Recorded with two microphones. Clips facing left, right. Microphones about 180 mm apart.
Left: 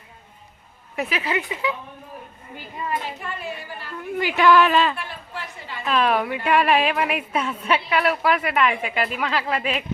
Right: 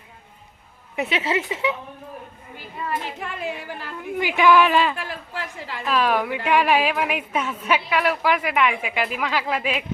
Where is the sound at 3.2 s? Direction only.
90° right.